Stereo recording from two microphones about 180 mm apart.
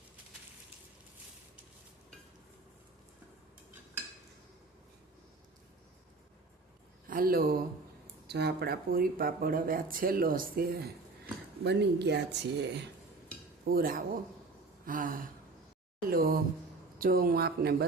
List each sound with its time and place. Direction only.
7.1 s speech: 55° right (ahead or behind)
8.3 s speech: 65° right (ahead or behind)
11.6 s speech: 70° right (ahead or behind)
13.7 s speech: 55° right (ahead or behind)